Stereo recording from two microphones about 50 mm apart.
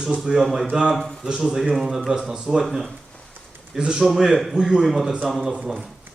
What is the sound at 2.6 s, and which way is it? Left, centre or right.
Speech, centre.